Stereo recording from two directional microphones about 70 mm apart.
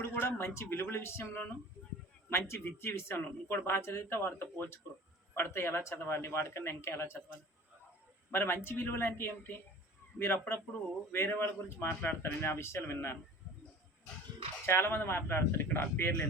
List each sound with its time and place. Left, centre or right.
0.0 s a man's voice: left
1.3 s speech: left
2.5 s a man's voice: left
8.3 s a man's voice: left
14.7 s a man's voice: left